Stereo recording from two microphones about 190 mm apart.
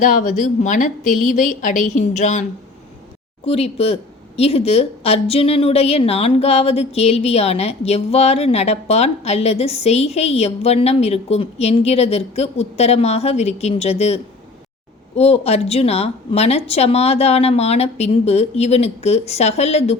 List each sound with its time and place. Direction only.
0.0 s a woman's voice: 45° left (ahead or behind)